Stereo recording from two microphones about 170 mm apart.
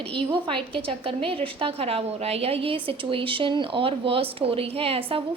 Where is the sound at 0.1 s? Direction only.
30° right (ahead or behind).